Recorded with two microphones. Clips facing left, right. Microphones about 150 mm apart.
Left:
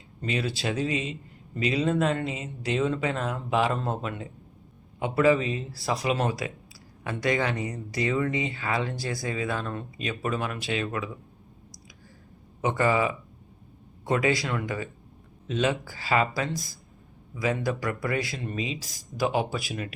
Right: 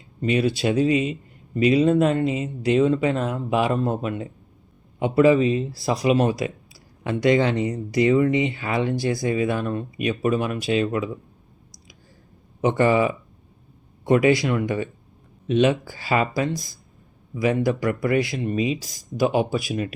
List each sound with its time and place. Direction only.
0.3 s speech: 20° right (ahead or behind)
0.8 s speech: 30° left (ahead or behind)
1.7 s speech: 15° right (ahead or behind)
12.6 s speech: 25° right (ahead or behind)
14.4 s speech: 20° right (ahead or behind)